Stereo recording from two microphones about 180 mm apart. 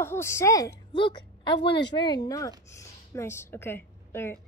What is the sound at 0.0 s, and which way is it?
A woman's voice, 15° left (ahead or behind).